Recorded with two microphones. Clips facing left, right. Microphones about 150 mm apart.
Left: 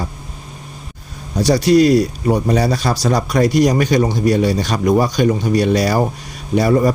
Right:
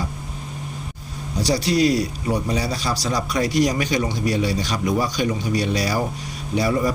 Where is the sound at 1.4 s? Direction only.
50° left (ahead or behind).